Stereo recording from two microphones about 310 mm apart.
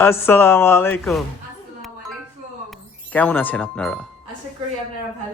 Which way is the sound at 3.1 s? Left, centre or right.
Centre.